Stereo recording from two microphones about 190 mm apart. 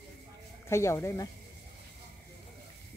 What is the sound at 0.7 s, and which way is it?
Speech, 15° left (ahead or behind).